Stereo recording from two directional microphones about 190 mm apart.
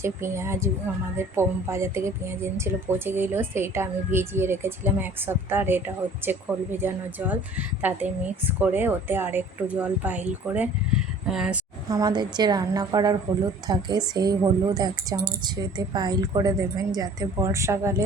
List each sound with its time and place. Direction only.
0.0 s speech: 15° right (ahead or behind)
11.9 s a woman's voice: 20° right (ahead or behind)